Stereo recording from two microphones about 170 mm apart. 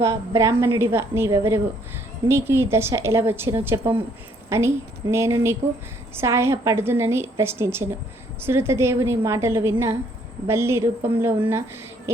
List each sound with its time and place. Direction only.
0.0 s a woman's voice: 20° right (ahead or behind)